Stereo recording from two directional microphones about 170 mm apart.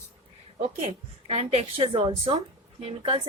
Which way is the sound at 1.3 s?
40° right (ahead or behind).